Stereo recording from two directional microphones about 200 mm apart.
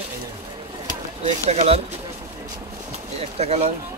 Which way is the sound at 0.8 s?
30° right (ahead or behind).